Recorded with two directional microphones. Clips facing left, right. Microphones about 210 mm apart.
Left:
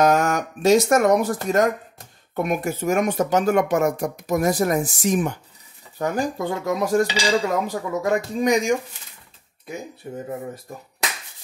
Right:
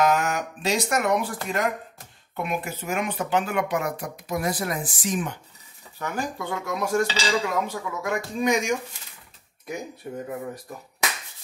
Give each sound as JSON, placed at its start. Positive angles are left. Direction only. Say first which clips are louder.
{"t": 0.0, "sound": "speech", "louder": "left 4 dB", "side_deg": 45}
{"t": 5.9, "sound": "dishes", "louder": "left 6 dB", "side_deg": 40}